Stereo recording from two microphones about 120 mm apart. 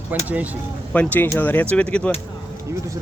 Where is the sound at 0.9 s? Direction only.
15° left (ahead or behind).